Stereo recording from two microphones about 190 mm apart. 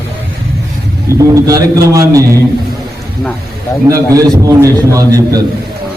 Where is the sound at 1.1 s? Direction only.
15° right (ahead or behind).